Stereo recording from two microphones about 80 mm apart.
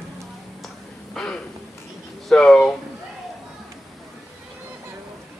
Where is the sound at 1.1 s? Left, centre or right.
Centre.